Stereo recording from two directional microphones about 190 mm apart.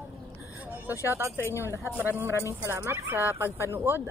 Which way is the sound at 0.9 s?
15° left (ahead or behind).